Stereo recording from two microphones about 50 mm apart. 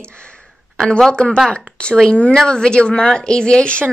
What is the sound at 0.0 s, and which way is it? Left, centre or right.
Speech, left.